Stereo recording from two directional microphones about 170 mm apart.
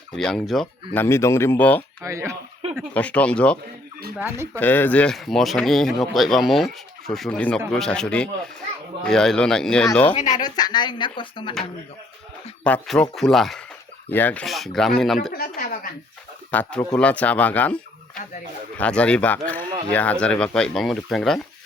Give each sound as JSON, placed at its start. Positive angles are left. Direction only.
{"t": 0.2, "sound": "speech", "side_deg": 5}
{"t": 0.9, "sound": "speech", "side_deg": 15}
{"t": 2.0, "sound": "speech", "side_deg": -15}
{"t": 2.7, "sound": "speech", "side_deg": 10}
{"t": 4.2, "sound": "speech", "side_deg": -15}
{"t": 4.6, "sound": "speech", "side_deg": 10}
{"t": 10.2, "sound": "speech", "side_deg": 45}
{"t": 10.4, "sound": "speech", "side_deg": 25}
{"t": 12.6, "sound": "speech", "side_deg": 5}
{"t": 15.3, "sound": "speech", "side_deg": 60}
{"t": 16.5, "sound": "speech", "side_deg": 10}